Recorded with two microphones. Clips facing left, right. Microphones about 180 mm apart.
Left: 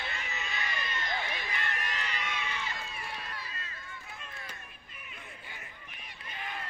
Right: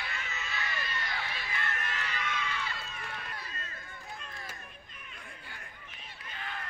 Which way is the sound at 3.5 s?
45° right (ahead or behind).